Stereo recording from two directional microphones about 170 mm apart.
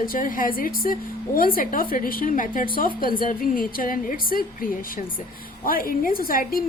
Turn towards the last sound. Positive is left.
turn(degrees=60)  # may be behind; listen again after turning